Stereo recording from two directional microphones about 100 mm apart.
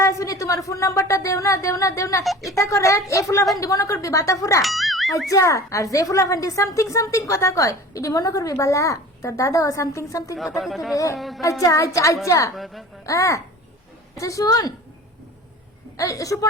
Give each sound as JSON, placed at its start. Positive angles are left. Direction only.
{"t": 0.0, "sound": "a woman's voice", "side_deg": 30}
{"t": 2.2, "sound": "speech", "side_deg": 0}
{"t": 2.6, "sound": "a woman's voice", "side_deg": 30}
{"t": 4.6, "sound": "a child's voice", "side_deg": 0}
{"t": 5.3, "sound": "a woman's voice", "side_deg": 30}
{"t": 10.3, "sound": "speech", "side_deg": 0}
{"t": 10.9, "sound": "a woman's voice", "side_deg": 35}
{"t": 11.2, "sound": "speech", "side_deg": 0}
{"t": 11.6, "sound": "a woman's voice", "side_deg": 30}
{"t": 12.5, "sound": "speech", "side_deg": 0}
{"t": 13.1, "sound": "a woman's voice", "side_deg": 30}
{"t": 16.0, "sound": "a woman's voice", "side_deg": 35}